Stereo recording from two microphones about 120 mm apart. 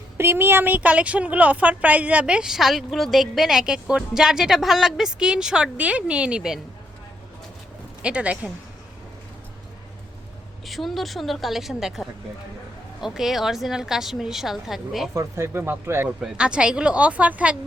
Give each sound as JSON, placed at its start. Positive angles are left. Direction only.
{"t": 0.2, "sound": "a woman's voice", "side_deg": -20}
{"t": 8.0, "sound": "a woman's voice", "side_deg": -10}
{"t": 10.7, "sound": "a woman's voice", "side_deg": 0}
{"t": 15.1, "sound": "a woman's voice", "side_deg": -25}